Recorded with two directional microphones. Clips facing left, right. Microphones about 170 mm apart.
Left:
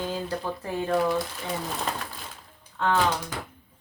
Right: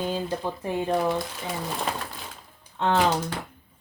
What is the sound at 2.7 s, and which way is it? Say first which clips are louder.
Speech: right 1 dB; 25° right (ahead or behind).